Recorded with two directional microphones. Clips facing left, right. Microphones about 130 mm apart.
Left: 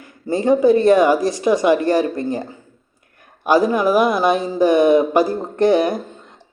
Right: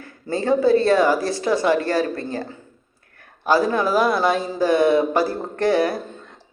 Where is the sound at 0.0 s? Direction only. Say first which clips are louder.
Left 5 dB; 15° left (ahead or behind).